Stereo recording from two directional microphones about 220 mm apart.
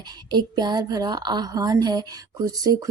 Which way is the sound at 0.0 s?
20° right (ahead or behind).